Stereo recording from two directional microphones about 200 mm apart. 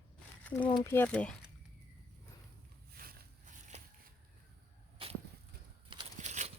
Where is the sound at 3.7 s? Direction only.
35° right (ahead or behind).